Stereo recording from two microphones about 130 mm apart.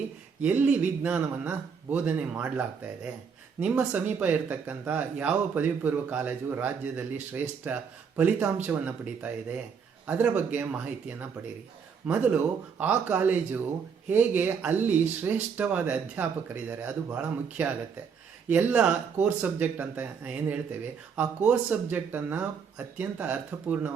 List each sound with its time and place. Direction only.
0.4 s speech: 10° right (ahead or behind)